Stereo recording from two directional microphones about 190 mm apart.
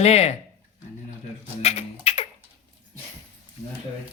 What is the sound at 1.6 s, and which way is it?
Speech, 35° left (ahead or behind).